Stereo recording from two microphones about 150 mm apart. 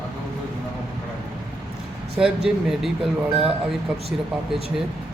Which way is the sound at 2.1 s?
5° right (ahead or behind).